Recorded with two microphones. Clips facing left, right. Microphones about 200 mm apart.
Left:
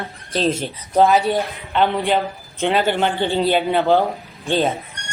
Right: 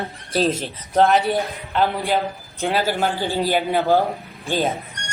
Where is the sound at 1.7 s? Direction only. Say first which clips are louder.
Left 3 dB; 5° right (ahead or behind).